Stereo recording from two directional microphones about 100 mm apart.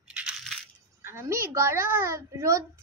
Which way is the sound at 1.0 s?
25° right (ahead or behind).